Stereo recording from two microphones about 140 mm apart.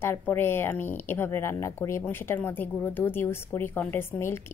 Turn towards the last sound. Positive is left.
turn(degrees=15)  # may be behind; listen again after turning